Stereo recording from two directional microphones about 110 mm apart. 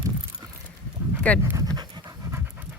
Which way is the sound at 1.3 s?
15° left (ahead or behind).